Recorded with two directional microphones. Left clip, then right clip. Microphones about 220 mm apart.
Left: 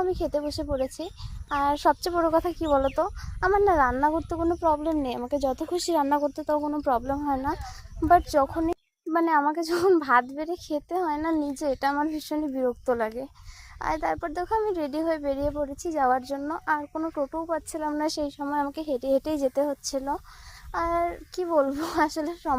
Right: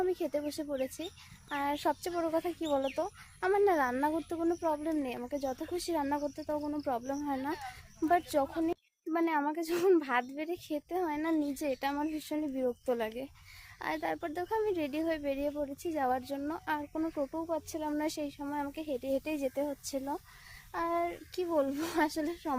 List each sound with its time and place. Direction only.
0.1 s speech: 20° left (ahead or behind)
3.5 s a child's voice: 10° left (ahead or behind)
4.9 s speech: 35° left (ahead or behind)
8.6 s a child's voice: 15° left (ahead or behind)
11.1 s a child's voice: 5° left (ahead or behind)
11.7 s a child's voice: 25° left (ahead or behind)
17.2 s a child's voice: 25° left (ahead or behind)